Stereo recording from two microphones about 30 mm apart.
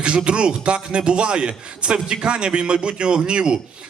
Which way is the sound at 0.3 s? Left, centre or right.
Right.